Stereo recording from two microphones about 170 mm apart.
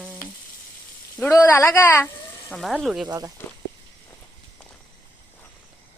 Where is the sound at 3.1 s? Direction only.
20° right (ahead or behind).